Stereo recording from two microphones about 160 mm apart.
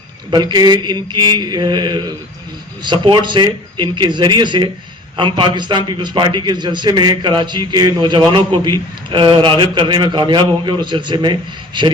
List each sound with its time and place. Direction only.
0.3 s a man's voice: 25° right (ahead or behind)